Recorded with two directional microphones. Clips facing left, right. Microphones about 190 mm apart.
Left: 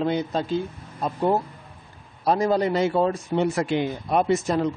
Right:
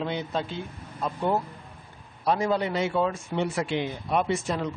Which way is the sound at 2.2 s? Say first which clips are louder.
Left 4 dB; 35° left (ahead or behind).